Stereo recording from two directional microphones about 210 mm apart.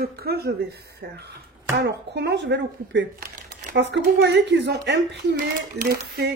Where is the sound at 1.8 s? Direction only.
55° right (ahead or behind).